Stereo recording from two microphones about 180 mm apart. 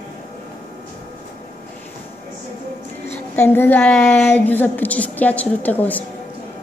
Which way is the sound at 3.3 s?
10° left (ahead or behind).